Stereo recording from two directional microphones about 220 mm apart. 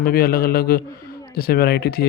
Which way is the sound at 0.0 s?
45° left (ahead or behind).